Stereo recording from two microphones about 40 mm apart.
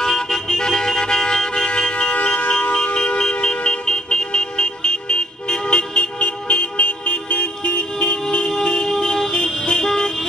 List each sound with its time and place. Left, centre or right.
0.0 s vehicle: centre; by 8.5 s left
9.3 s vehicle: left